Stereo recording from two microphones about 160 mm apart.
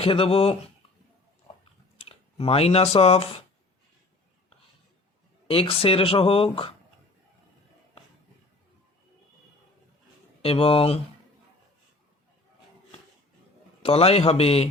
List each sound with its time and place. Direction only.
0.0 s speech: 35° left (ahead or behind)
2.0 s speech: 40° left (ahead or behind)
5.5 s speech: 35° left (ahead or behind)
10.4 s speech: 35° left (ahead or behind)
13.8 s speech: 40° left (ahead or behind)